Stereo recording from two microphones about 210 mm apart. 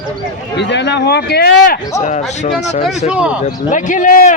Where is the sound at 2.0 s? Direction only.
35° left (ahead or behind).